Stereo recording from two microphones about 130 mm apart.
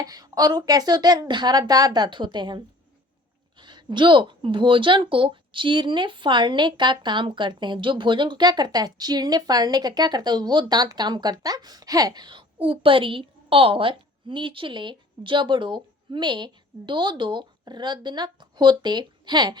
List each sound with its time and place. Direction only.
0.0 s speech: 30° right (ahead or behind)